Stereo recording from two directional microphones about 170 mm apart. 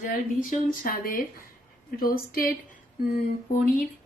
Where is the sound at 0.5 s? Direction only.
55° left (ahead or behind).